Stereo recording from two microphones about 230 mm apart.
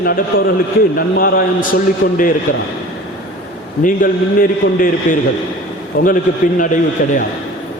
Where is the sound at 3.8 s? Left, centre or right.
Left.